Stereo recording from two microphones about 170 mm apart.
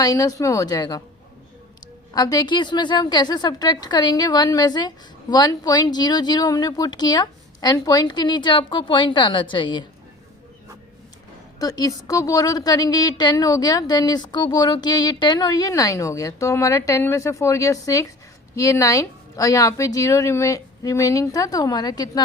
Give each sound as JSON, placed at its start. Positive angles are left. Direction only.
{"t": 0.0, "sound": "a woman's voice", "side_deg": 20}
{"t": 2.1, "sound": "a woman's voice", "side_deg": 20}
{"t": 11.6, "sound": "a woman's voice", "side_deg": 20}